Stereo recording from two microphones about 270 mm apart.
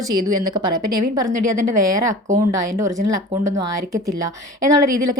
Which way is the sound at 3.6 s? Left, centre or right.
Right.